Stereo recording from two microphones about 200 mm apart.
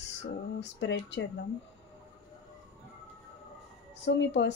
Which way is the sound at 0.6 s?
65° left (ahead or behind).